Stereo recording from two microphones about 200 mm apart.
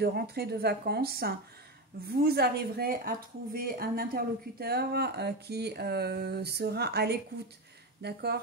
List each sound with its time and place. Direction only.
0.0 s speech: 50° right (ahead or behind)